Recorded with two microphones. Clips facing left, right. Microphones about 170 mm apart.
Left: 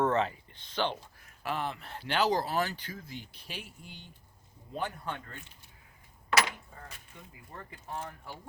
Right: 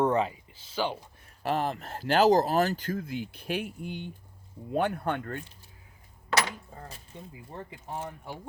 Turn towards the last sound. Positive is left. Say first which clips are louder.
# right 5 dB
turn(degrees=-20)  # may be behind; listen again after turning